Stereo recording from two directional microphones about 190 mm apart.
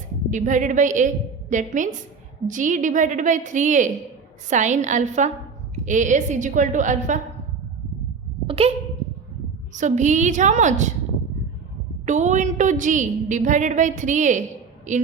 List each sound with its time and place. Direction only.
0.3 s a woman's voice: 40° right (ahead or behind)
8.4 s a sound: 30° right (ahead or behind)
9.7 s a woman's voice: 40° right (ahead or behind)
12.0 s a woman's voice: 40° right (ahead or behind)